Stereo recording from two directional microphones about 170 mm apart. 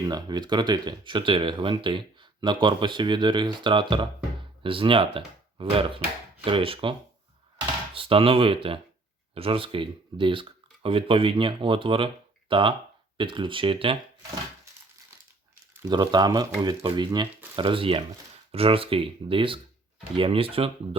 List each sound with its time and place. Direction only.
0.0 s speech: 25° right (ahead or behind)
7.9 s speech: 30° right (ahead or behind)
15.8 s speech: 25° right (ahead or behind)